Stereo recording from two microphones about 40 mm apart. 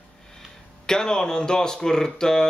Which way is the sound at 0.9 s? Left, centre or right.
Centre.